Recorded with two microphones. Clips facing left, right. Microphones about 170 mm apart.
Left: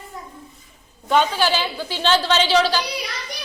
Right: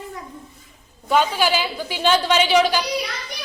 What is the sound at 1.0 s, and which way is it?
A woman's voice, 5° right (ahead or behind).